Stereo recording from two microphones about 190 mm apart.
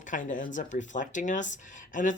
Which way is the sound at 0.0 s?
40° left (ahead or behind).